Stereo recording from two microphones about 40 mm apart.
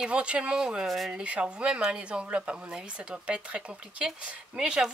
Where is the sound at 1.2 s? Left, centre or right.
Right.